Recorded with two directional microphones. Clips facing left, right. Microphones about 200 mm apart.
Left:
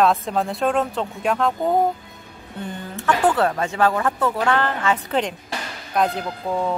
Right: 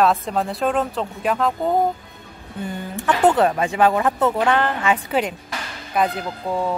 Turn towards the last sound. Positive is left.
turn(degrees=0)  # may be behind; listen again after turning